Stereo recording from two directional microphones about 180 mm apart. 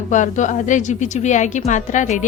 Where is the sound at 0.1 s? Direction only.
45° left (ahead or behind).